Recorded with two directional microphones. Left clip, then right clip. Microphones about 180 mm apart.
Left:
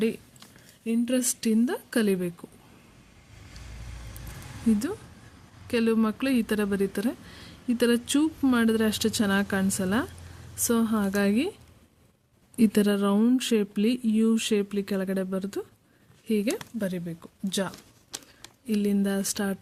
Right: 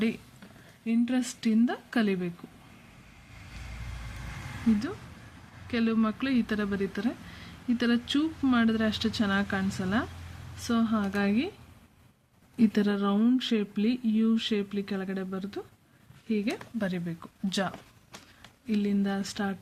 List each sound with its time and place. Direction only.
0.9 s speech: 40° left (ahead or behind)
5.6 s speech: 40° left (ahead or behind)
12.5 s speech: 45° left (ahead or behind)
16.7 s speech: 25° left (ahead or behind)
18.7 s speech: 40° left (ahead or behind)